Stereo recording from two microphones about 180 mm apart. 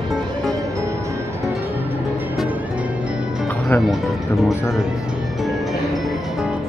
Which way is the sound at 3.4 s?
10° left (ahead or behind).